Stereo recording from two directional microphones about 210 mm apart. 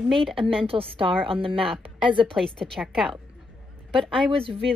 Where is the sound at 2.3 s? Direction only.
5° left (ahead or behind).